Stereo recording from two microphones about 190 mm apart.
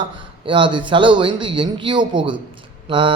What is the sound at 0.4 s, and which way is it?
Speech, 25° right (ahead or behind).